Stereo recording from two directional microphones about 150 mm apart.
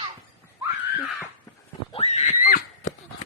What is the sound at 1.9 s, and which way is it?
Screaming, 45° left (ahead or behind).